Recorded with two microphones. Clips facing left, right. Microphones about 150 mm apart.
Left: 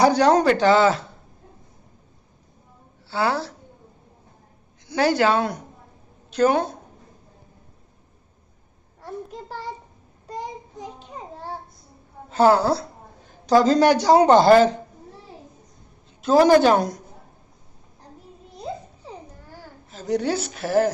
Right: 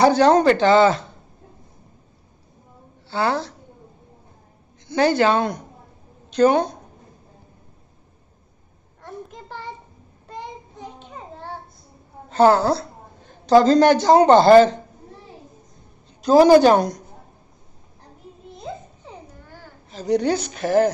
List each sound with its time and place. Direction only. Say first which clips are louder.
0.0 s speech: right 2 dB; 10° left (ahead or behind)
3.1 s speech: right 1 dB; 10° left (ahead or behind)
4.8 s a woman's voice: right 2 dB; 10° left (ahead or behind)
9.3 s a sound: left 4 dB; 35° left (ahead or behind)
10.2 s child singing: left 2 dB; 40° left (ahead or behind)
12.3 s a woman's voice: right 2 dB; 10° left (ahead or behind)
16.5 s a woman's voice: right 3 dB; centre (ahead or behind)
19.5 s a child's voice: right 3 dB; centre (ahead or behind)